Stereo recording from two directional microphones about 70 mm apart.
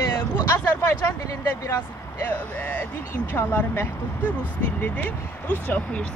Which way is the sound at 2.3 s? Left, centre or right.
Left.